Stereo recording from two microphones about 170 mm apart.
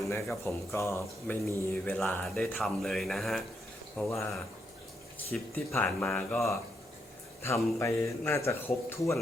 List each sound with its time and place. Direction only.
0.0 s a sound: 15° left (ahead or behind)
0.7 s speech: 15° left (ahead or behind)
5.1 s speech: 10° left (ahead or behind)
7.4 s speech: 15° left (ahead or behind)